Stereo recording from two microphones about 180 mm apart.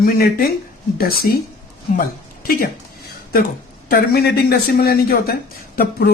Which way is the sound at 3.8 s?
60° left (ahead or behind).